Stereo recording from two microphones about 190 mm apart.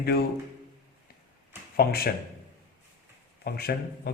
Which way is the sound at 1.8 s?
55° left (ahead or behind).